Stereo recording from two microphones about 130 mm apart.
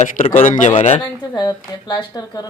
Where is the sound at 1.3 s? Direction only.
35° left (ahead or behind).